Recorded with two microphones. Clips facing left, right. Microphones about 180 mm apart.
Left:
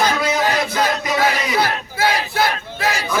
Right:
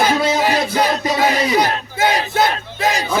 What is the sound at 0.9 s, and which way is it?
Music, 30° right (ahead or behind).